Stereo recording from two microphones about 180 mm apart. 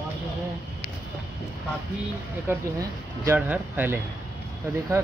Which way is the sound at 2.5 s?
10° right (ahead or behind).